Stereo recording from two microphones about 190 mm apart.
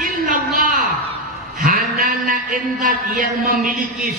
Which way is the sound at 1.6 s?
50° right (ahead or behind).